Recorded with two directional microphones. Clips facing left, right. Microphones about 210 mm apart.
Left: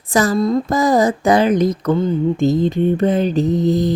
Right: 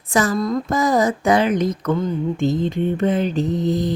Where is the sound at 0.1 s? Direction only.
35° left (ahead or behind).